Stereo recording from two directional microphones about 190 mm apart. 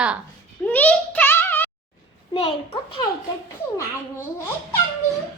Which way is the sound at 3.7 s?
15° left (ahead or behind).